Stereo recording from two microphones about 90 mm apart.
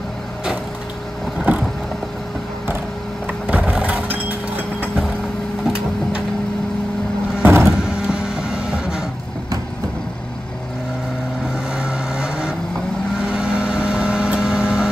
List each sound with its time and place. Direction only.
1.4 s vehicle: 10° right (ahead or behind)
3.3 s music: 15° right (ahead or behind)
7.4 s vehicle: 30° right (ahead or behind)
7.7 s vehicle: 5° right (ahead or behind)
11.7 s vehicle: 5° right (ahead or behind)